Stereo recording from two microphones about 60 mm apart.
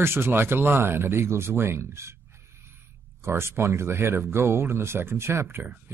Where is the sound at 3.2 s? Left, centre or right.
Right.